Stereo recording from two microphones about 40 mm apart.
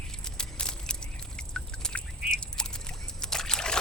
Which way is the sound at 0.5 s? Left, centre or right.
Left.